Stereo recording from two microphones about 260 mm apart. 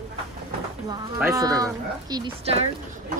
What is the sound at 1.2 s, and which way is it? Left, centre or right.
A woman's voice, centre.